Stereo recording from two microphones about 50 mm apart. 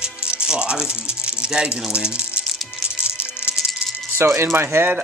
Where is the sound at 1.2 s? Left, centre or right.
Right.